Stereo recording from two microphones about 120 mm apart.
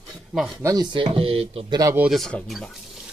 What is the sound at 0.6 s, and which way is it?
Speech, 25° right (ahead or behind).